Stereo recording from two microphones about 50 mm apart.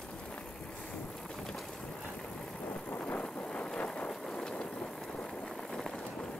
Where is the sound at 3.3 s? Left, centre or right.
Left.